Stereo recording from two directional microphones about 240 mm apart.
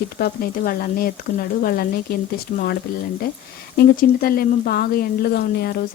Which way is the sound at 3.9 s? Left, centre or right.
Left.